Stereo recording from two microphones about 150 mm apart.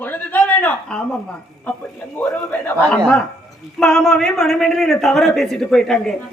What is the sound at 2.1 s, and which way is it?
A man's voice, 10° left (ahead or behind).